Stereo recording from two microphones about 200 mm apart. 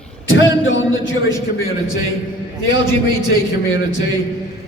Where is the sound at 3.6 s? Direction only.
70° left (ahead or behind).